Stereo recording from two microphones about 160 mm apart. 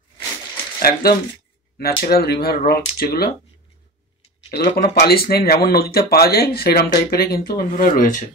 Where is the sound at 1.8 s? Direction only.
70° left (ahead or behind).